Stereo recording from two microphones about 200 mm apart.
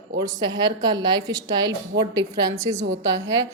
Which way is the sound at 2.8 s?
60° right (ahead or behind).